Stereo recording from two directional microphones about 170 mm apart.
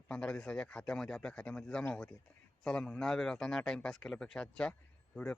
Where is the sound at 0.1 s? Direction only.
5° left (ahead or behind).